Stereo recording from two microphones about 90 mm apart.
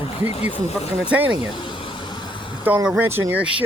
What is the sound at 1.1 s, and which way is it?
Speech, 15° right (ahead or behind).